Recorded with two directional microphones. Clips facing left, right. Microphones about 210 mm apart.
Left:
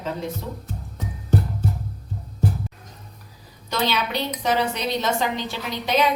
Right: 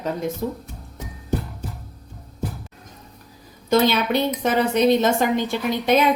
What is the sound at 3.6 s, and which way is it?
A woman's voice, 50° right (ahead or behind).